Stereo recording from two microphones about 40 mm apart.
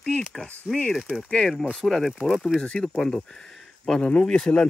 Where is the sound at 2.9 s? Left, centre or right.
Centre.